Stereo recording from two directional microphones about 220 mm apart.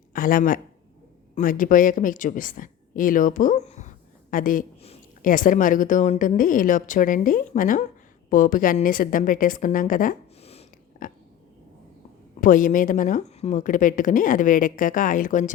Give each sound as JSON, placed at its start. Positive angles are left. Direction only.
{"t": 0.1, "sound": "a woman's voice", "side_deg": 40}
{"t": 12.4, "sound": "a woman's voice", "side_deg": 35}